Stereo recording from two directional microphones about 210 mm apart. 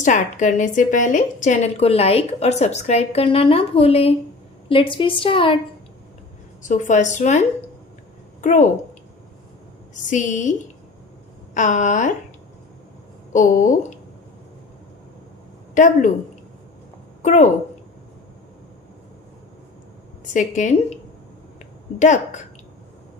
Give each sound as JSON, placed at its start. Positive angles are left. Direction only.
{"t": 0.0, "sound": "a woman's voice", "side_deg": 35}
{"t": 6.6, "sound": "a woman's voice", "side_deg": 35}
{"t": 9.9, "sound": "a woman's voice", "side_deg": 35}
{"t": 11.5, "sound": "a woman's voice", "side_deg": 35}
{"t": 13.3, "sound": "a woman's voice", "side_deg": 40}
{"t": 15.7, "sound": "a woman's voice", "side_deg": 35}
{"t": 17.2, "sound": "a woman's voice", "side_deg": 35}
{"t": 20.3, "sound": "a woman's voice", "side_deg": 35}